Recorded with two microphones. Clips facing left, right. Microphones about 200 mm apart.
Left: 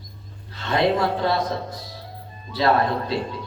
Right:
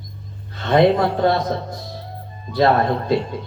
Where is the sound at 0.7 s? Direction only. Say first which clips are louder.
Right 5 dB; 50° right (ahead or behind).